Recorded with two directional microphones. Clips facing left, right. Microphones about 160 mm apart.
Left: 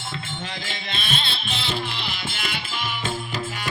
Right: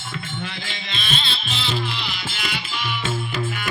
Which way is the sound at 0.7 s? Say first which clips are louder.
Left 2 dB; 50° left (ahead or behind).